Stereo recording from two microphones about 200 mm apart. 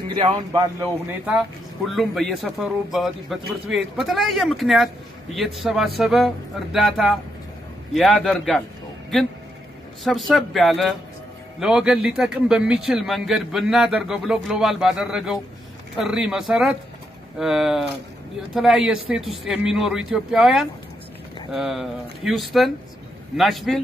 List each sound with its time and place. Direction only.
0.2 s speech: 20° right (ahead or behind)
1.9 s a man's voice: centre (ahead or behind)
10.0 s a man's voice: centre (ahead or behind)